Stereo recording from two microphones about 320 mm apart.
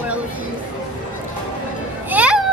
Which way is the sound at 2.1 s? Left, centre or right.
Centre.